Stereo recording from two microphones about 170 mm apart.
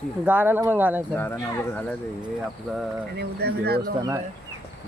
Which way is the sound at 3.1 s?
70° right (ahead or behind).